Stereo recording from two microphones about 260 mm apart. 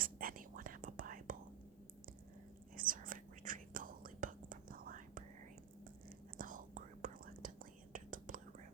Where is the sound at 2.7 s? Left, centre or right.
Right.